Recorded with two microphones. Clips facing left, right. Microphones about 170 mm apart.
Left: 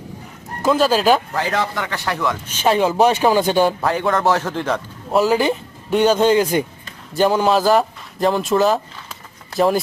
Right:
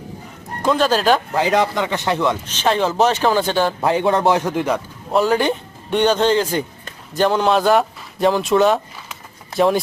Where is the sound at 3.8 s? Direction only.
20° right (ahead or behind).